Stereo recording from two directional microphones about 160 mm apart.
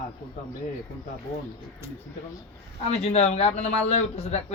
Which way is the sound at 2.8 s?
40° left (ahead or behind).